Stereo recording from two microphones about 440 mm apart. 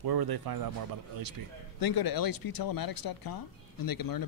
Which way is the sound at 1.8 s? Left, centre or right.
Left.